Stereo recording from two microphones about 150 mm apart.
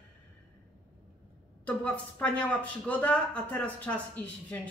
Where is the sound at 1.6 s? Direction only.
10° left (ahead or behind).